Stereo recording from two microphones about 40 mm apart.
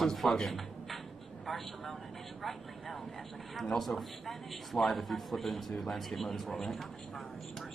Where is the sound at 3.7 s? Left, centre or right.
Centre.